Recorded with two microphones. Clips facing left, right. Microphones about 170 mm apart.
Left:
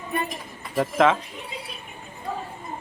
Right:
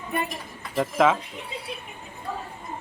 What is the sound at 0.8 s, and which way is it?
Speech, centre (ahead or behind).